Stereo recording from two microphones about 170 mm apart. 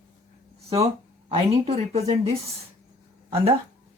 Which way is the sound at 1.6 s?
40° right (ahead or behind).